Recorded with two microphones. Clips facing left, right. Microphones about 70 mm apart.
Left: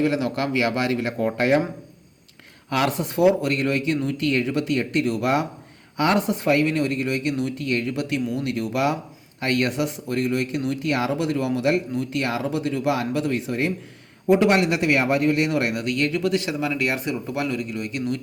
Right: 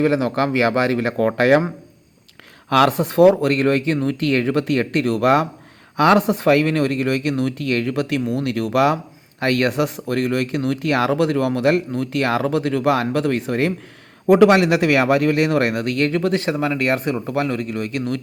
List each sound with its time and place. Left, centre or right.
0.0 s speech: right
2.6 s speech: right